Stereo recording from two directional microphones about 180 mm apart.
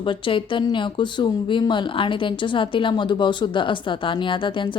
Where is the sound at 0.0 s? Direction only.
30° left (ahead or behind).